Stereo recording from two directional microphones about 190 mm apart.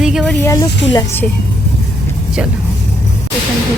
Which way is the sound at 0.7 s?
70° left (ahead or behind).